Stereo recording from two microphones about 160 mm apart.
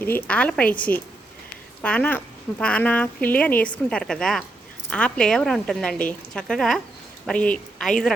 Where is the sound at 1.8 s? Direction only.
10° left (ahead or behind).